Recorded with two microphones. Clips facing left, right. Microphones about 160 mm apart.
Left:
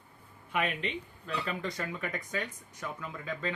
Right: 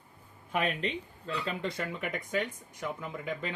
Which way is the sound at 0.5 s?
40° right (ahead or behind).